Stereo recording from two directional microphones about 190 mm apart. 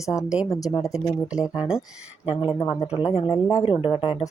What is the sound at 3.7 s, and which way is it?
Speech, 30° left (ahead or behind).